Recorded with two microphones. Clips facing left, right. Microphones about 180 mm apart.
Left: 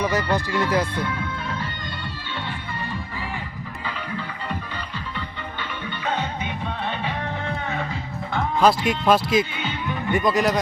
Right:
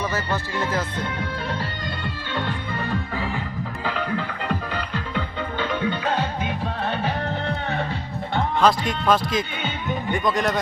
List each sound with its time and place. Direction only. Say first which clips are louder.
0.0 s music: left 4 dB; 15° left (ahead or behind)
0.7 s speech: left 4 dB; 10° left (ahead or behind)
1.2 s music: right 2 dB; 35° right (ahead or behind)
2.3 s music: right 5 dB; 55° right (ahead or behind)
8.6 s speech: left 2 dB; 10° left (ahead or behind)